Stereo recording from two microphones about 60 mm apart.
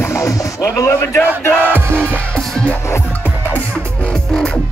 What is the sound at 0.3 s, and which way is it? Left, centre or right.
Music, left.